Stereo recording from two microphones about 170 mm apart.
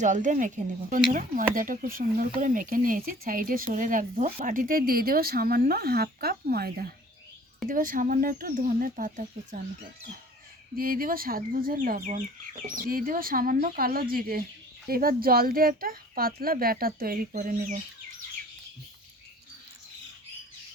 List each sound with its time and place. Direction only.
0.0 s speech: 45° right (ahead or behind); by 6.9 s 65° right (ahead or behind)
7.7 s speech: 50° right (ahead or behind)
10.8 s speech: 60° right (ahead or behind)